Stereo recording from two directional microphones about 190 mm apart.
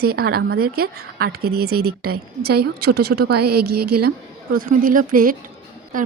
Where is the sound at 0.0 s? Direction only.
55° right (ahead or behind).